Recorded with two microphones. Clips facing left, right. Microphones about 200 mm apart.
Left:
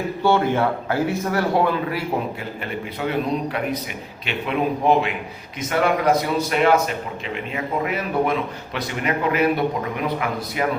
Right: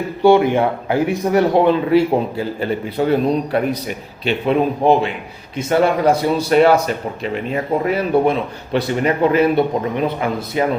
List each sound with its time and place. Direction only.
0.2 s a man's voice: 15° right (ahead or behind); by 3.1 s 35° right (ahead or behind)
4.3 s a man's voice: 35° right (ahead or behind)